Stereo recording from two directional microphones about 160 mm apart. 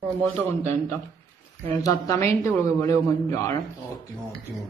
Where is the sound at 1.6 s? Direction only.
20° left (ahead or behind).